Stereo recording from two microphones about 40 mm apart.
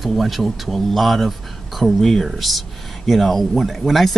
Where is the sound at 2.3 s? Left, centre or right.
Centre.